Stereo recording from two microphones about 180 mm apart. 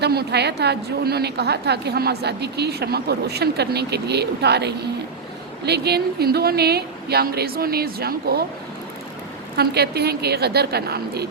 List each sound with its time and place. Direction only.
0.0 s a woman's voice: 65° right (ahead or behind)
9.6 s a woman's voice: 65° right (ahead or behind)